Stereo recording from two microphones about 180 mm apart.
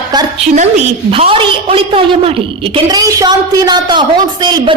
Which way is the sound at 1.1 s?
30° right (ahead or behind).